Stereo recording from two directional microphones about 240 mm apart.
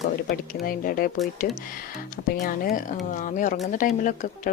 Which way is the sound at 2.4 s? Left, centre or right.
Left.